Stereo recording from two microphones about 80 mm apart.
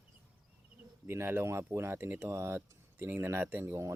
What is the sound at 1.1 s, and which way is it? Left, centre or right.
Speech, right.